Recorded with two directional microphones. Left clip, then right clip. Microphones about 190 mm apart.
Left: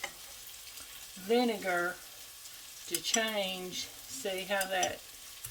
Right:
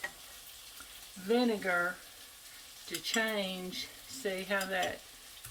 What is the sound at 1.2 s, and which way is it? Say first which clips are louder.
Speech: left 1 dB; 25° right (ahead or behind).